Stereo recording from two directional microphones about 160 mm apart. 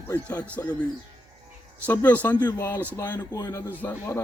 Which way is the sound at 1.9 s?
10° left (ahead or behind).